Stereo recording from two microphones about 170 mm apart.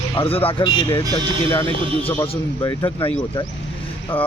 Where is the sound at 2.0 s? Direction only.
30° left (ahead or behind).